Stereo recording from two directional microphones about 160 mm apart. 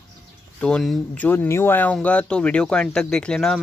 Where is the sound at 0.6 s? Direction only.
5° left (ahead or behind).